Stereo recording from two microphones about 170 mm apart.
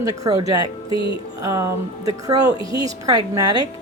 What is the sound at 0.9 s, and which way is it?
Music, 30° left (ahead or behind).